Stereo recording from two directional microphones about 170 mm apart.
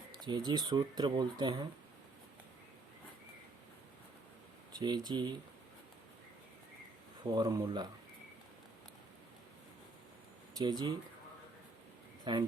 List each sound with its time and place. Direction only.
0.2 s speech: 25° right (ahead or behind)
4.7 s speech: 25° right (ahead or behind)
7.3 s speech: 20° right (ahead or behind)
10.6 s speech: 25° right (ahead or behind)
12.2 s a man's voice: 25° right (ahead or behind)